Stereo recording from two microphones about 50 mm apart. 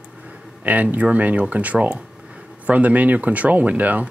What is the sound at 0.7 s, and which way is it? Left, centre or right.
Speech, right.